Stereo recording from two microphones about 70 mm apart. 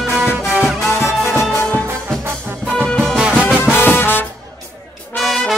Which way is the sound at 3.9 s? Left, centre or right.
Left.